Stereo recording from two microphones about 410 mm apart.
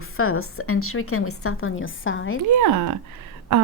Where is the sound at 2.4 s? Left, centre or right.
Right.